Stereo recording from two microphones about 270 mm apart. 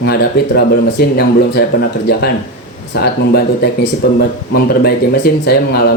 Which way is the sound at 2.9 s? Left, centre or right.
Left.